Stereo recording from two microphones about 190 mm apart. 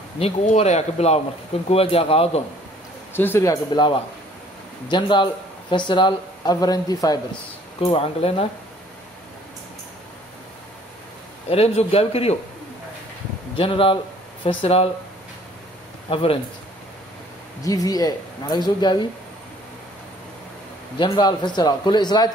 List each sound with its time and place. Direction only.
0.2 s speech: 35° left (ahead or behind)
3.1 s a man's voice: 10° left (ahead or behind); by 8.5 s 30° left (ahead or behind)
11.4 s speech: 35° left (ahead or behind)
13.6 s speech: 30° left (ahead or behind)
16.1 s speech: 30° left (ahead or behind)
17.6 s speech: 20° left (ahead or behind)
21.0 s speech: 25° left (ahead or behind)